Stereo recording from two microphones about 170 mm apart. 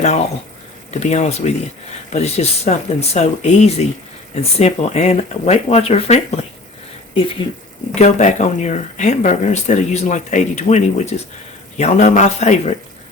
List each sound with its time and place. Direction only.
0.0 s speech: 40° left (ahead or behind)
7.9 s speech: 45° left (ahead or behind)